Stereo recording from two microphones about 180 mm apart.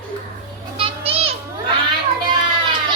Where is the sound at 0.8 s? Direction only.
30° right (ahead or behind).